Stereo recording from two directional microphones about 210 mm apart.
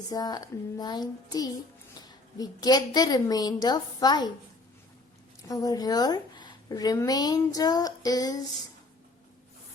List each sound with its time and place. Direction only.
0.1 s a woman's voice: 20° left (ahead or behind)
5.5 s a woman's voice: 15° left (ahead or behind)